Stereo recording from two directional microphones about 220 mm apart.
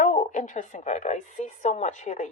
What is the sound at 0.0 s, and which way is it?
A woman's voice, 35° left (ahead or behind).